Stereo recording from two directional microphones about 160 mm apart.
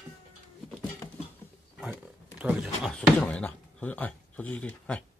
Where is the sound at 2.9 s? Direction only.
5° left (ahead or behind).